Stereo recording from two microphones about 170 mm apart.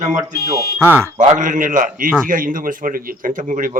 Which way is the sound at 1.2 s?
50° right (ahead or behind).